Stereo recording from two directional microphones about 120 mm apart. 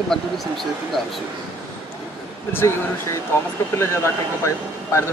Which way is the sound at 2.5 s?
20° left (ahead or behind).